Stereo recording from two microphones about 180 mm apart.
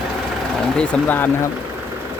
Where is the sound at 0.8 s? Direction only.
10° left (ahead or behind).